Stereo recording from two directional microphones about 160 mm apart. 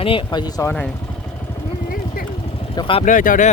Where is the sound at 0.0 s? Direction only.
30° left (ahead or behind).